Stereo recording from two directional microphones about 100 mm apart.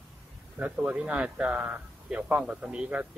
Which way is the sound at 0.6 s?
15° right (ahead or behind).